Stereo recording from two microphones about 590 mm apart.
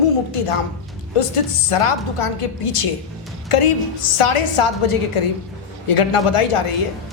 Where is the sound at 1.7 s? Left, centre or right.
Left.